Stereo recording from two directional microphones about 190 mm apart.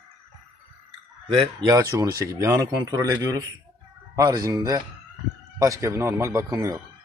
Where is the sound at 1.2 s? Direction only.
30° right (ahead or behind).